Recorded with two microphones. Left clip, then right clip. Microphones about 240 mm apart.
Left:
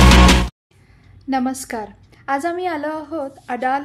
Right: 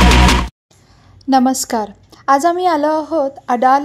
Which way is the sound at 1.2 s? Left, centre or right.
Right.